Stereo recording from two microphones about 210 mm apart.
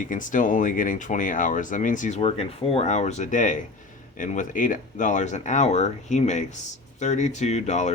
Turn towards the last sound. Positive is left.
turn(degrees=35)  # may be behind; listen again after turning